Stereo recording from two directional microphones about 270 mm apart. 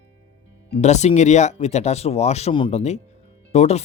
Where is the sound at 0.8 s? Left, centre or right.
Left.